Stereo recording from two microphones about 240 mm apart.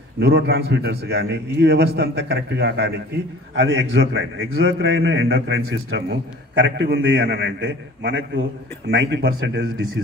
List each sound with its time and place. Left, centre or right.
0.2 s a man's voice: right